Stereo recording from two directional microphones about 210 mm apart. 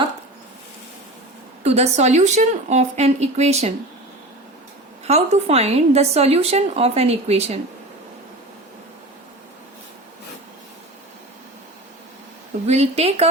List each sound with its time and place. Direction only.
1.6 s speech: 30° right (ahead or behind)
5.0 s speech: 30° right (ahead or behind)
12.6 s a woman's voice: 30° right (ahead or behind)